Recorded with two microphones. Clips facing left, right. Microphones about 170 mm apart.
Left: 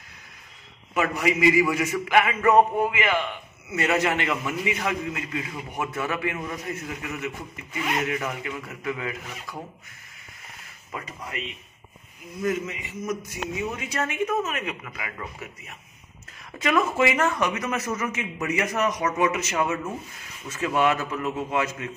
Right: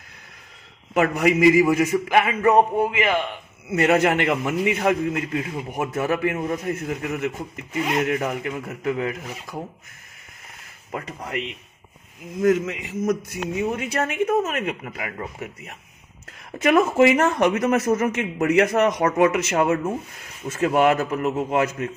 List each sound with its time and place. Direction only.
0.9 s a man's voice: 50° right (ahead or behind); by 3.2 s 35° right (ahead or behind)
3.6 s speech: 55° right (ahead or behind)
6.6 s speech: 50° right (ahead or behind)
10.9 s speech: 50° right (ahead or behind)
12.2 s speech: 85° right
13.7 s a man's voice: 55° right (ahead or behind)